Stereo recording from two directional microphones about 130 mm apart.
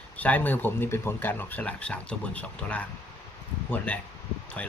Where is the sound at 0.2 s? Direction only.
10° left (ahead or behind).